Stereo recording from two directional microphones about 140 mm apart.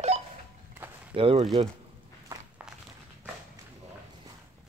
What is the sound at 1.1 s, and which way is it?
Speech, 40° right (ahead or behind).